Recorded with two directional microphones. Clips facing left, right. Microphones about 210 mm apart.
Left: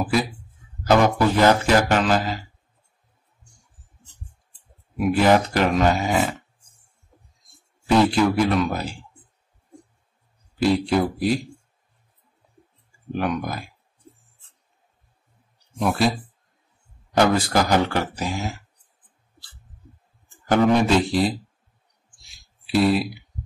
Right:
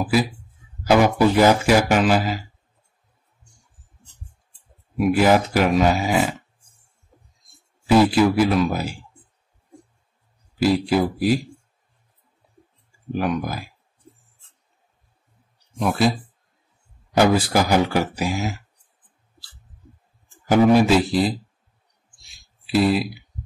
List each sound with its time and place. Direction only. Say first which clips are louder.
0.1 s speech: right 2 dB; 5° right (ahead or behind)
4.9 s speech: right 1 dB; 5° right (ahead or behind)
7.9 s speech: right 2 dB; 5° right (ahead or behind)
10.6 s speech: right 1 dB; 5° right (ahead or behind)
13.1 s speech: right 1 dB; 5° right (ahead or behind)
15.7 s speech: right 1 dB; centre (ahead or behind)
20.4 s speech: right 3 dB; 5° right (ahead or behind)
22.7 s speech: even; centre (ahead or behind)